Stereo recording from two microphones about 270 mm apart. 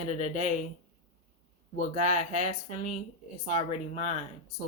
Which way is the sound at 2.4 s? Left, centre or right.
Left.